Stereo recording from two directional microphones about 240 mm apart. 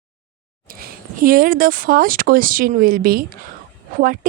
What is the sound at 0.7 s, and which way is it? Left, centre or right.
Speech, right.